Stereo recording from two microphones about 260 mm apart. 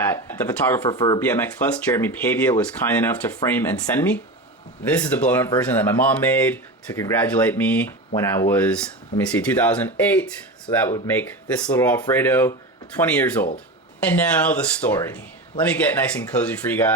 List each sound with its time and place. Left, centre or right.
0.0 s speech: centre